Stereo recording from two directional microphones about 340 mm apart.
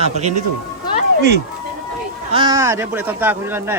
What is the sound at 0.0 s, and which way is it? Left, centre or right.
Speech, centre.